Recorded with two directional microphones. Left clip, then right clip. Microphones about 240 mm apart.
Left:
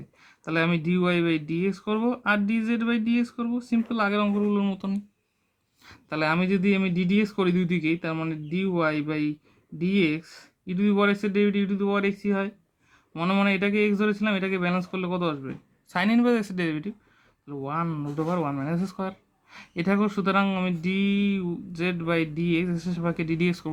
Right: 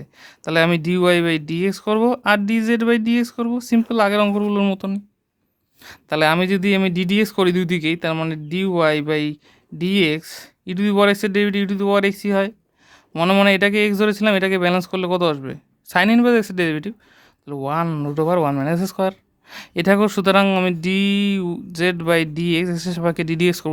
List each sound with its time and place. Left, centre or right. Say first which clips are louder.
0.2 s speech: right 9 dB; right